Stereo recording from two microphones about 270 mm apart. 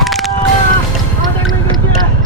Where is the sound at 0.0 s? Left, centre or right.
Centre.